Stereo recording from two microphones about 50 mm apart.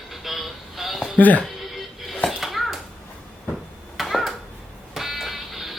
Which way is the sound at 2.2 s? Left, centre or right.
Centre.